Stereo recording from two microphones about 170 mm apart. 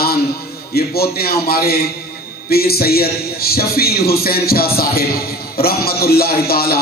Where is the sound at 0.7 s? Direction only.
65° left (ahead or behind).